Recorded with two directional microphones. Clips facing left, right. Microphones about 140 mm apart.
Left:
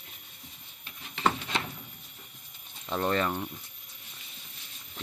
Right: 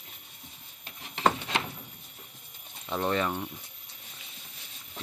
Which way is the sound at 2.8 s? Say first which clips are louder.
Even; 5° right (ahead or behind).